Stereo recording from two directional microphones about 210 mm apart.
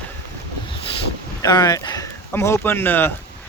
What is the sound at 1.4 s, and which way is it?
Speech, 20° left (ahead or behind).